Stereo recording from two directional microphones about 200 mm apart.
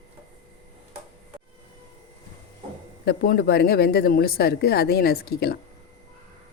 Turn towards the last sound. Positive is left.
turn(degrees=50)  # may be behind; listen again after turning